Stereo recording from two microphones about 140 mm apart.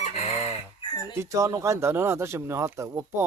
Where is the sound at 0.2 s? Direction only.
50° right (ahead or behind).